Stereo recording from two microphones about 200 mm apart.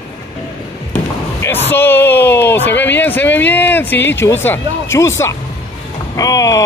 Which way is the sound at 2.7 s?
10° left (ahead or behind).